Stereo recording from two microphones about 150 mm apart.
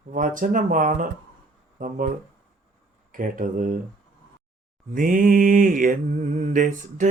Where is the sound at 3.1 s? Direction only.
65° right (ahead or behind).